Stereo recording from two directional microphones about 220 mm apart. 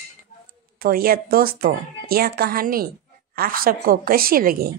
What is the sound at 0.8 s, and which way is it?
A woman's voice, 40° right (ahead or behind).